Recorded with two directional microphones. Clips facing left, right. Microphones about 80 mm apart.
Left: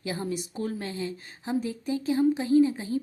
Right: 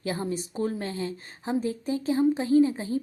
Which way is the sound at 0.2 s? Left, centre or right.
Right.